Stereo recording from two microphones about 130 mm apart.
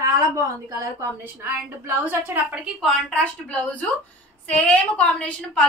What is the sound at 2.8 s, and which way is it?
A woman's voice, 5° left (ahead or behind).